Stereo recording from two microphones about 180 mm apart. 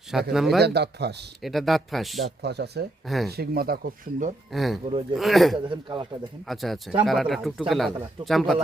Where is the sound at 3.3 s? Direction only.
60° right (ahead or behind).